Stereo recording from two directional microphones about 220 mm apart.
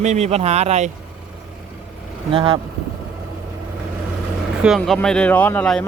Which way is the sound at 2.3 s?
25° right (ahead or behind).